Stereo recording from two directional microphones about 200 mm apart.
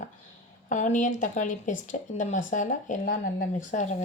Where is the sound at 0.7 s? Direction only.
40° left (ahead or behind).